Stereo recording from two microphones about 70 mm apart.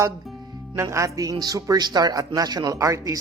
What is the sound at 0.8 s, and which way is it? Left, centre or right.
A man's voice, right.